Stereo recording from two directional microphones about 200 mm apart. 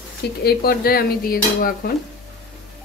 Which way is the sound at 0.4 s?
50° left (ahead or behind).